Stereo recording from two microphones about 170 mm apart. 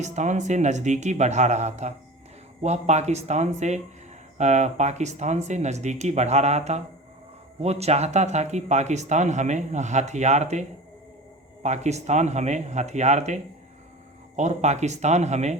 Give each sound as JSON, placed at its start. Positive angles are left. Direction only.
{"t": 0.0, "sound": "speech", "side_deg": -45}